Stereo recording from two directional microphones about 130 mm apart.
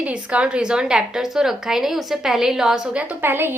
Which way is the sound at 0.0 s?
10° right (ahead or behind).